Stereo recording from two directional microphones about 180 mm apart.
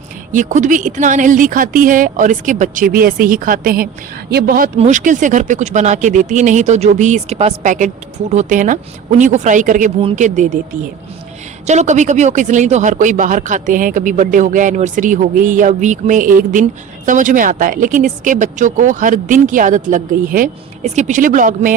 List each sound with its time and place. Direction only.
0.3 s speech: 45° right (ahead or behind)
11.6 s speech: 40° right (ahead or behind)